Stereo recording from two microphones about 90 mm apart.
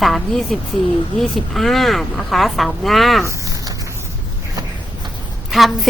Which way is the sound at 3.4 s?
40° right (ahead or behind).